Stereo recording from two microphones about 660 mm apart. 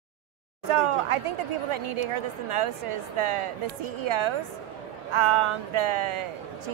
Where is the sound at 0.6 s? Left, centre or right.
Right.